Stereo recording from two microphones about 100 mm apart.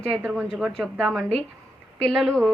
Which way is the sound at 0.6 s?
Centre (ahead or behind).